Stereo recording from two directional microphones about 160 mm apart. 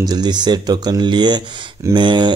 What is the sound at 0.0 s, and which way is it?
Speech, 25° right (ahead or behind).